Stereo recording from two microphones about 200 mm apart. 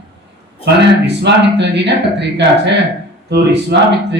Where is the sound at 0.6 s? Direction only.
60° right (ahead or behind).